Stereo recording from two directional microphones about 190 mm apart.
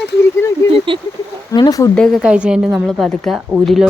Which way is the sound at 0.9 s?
25° right (ahead or behind).